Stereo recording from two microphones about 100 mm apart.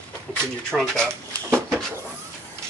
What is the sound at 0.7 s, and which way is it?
Speech, 5° left (ahead or behind).